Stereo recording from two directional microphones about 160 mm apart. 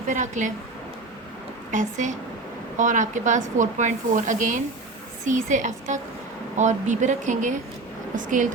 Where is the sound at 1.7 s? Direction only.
50° right (ahead or behind).